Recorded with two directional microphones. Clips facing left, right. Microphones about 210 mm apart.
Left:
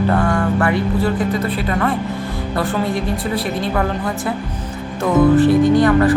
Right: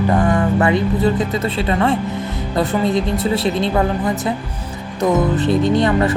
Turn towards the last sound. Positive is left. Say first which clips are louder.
# left 3 dB
turn(degrees=-25)  # may be behind; listen again after turning